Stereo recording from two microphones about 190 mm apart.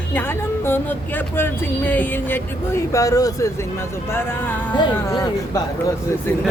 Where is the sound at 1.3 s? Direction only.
10° left (ahead or behind).